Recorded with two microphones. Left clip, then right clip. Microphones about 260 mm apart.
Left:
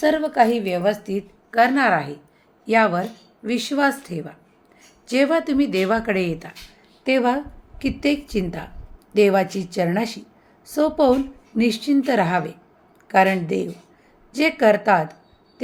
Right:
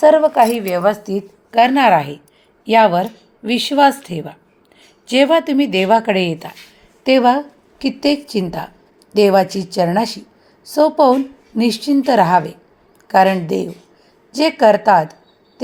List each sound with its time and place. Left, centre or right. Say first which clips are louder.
0.0 s a woman's voice: right 8 dB; centre